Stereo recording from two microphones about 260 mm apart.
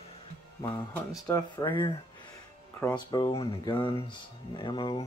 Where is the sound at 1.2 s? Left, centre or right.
Centre.